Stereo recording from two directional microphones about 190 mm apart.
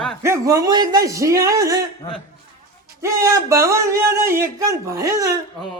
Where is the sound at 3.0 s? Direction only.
15° right (ahead or behind).